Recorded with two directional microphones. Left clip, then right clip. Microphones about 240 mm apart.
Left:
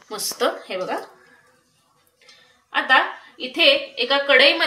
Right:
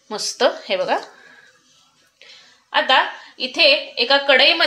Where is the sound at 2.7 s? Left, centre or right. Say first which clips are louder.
Right 1 dB; right.